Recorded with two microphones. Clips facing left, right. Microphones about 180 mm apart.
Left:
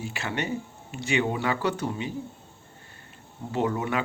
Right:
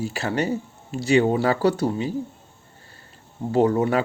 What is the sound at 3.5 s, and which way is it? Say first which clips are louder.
Speech: right 8 dB; 35° right (ahead or behind).